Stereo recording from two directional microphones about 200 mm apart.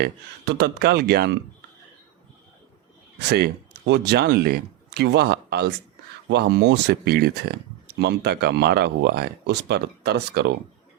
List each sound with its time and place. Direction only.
0.0 s speech: 55° right (ahead or behind)
3.2 s speech: 55° right (ahead or behind)